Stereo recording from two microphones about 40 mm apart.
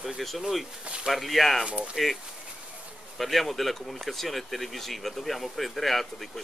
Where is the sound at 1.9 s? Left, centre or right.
Centre.